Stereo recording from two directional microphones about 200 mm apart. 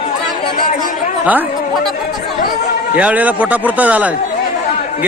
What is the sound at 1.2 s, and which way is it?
Speech, 10° right (ahead or behind).